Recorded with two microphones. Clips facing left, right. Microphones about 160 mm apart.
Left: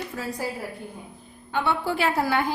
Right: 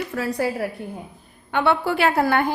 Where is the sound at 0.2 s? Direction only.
70° right (ahead or behind).